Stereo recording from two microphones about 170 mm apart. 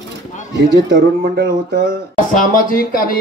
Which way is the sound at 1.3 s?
55° right (ahead or behind).